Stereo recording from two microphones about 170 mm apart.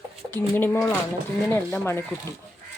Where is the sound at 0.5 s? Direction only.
10° left (ahead or behind).